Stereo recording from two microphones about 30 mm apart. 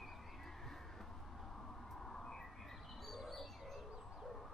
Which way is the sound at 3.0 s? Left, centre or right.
Centre.